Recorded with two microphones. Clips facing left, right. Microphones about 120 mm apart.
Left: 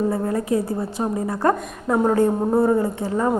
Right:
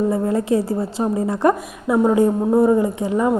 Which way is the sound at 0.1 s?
25° right (ahead or behind).